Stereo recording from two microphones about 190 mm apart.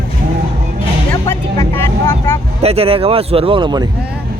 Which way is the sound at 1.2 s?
15° left (ahead or behind).